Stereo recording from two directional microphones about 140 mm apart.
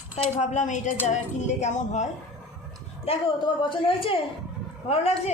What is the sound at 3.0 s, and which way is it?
A woman's voice, 35° left (ahead or behind).